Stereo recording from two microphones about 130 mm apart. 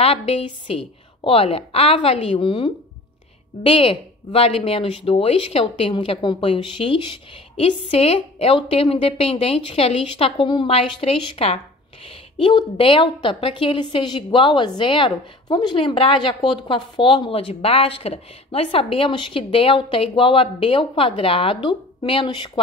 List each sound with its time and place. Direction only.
0.0 s a woman's voice: 50° left (ahead or behind)